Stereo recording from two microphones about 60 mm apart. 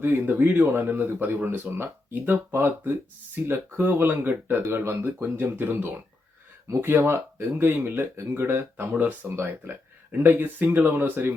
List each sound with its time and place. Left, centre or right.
0.0 s speech: right
8.9 s speech: right